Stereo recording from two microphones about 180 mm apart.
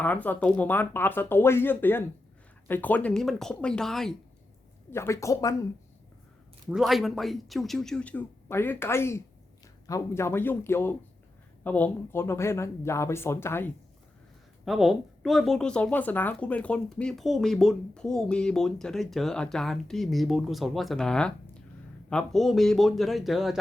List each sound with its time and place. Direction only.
0.0 s speech: 10° left (ahead or behind)
4.9 s speech: 15° left (ahead or behind)
6.7 s speech: centre (ahead or behind)
14.6 s speech: centre (ahead or behind)